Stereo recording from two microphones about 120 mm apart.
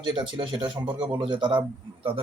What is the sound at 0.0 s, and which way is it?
A man's voice, 40° right (ahead or behind).